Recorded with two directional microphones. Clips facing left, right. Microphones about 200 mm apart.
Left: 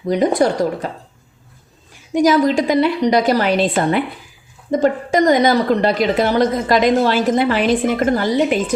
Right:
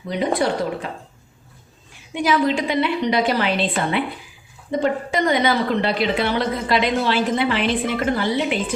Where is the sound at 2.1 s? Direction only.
40° left (ahead or behind).